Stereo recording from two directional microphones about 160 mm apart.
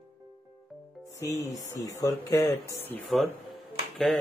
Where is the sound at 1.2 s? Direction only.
20° left (ahead or behind).